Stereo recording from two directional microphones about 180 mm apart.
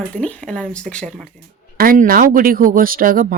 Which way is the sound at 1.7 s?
50° right (ahead or behind).